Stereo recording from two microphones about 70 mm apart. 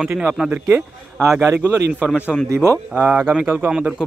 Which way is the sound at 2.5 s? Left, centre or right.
Right.